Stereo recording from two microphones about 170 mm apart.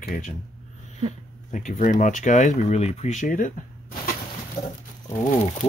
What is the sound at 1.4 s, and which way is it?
Speech, 50° left (ahead or behind).